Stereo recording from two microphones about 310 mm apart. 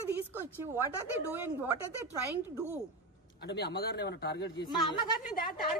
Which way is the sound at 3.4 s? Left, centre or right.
Left.